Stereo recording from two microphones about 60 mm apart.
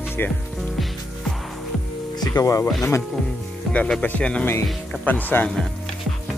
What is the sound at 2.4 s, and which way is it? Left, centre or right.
Speech, left.